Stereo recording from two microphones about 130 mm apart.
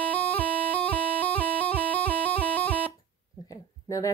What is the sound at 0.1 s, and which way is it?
Music, 15° left (ahead or behind).